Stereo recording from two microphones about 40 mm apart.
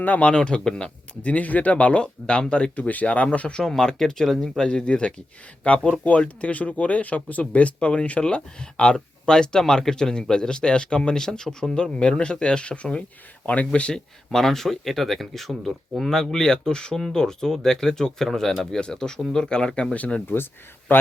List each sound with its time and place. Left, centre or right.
0.2 s speech: left
1.2 s speech: left
3.5 s speech: centre; by 8.2 s left
8.8 s speech: left
14.3 s speech: centre
19.9 s speech: left
20.2 s speech: left